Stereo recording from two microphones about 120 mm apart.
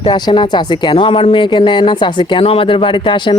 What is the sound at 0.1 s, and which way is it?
Speech, 40° left (ahead or behind).